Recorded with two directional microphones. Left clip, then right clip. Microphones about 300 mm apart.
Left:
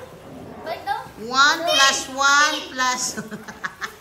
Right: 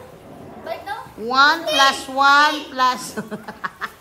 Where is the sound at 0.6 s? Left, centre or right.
Centre.